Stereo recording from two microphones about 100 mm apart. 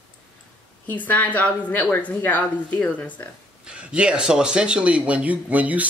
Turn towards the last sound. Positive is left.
turn(degrees=-15)  # may be behind; listen again after turning